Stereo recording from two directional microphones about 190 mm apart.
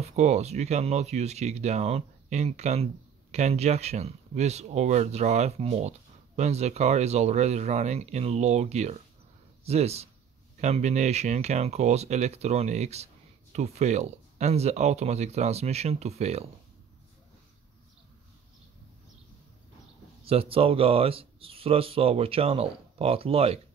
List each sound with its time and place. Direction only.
0.0 s speech: 35° right (ahead or behind)
20.2 s speech: 30° right (ahead or behind)